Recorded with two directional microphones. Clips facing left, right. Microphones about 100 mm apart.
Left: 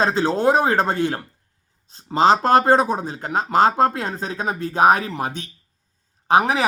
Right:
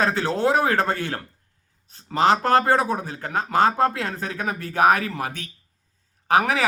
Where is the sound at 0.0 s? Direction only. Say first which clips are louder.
Left 3 dB; 20° left (ahead or behind).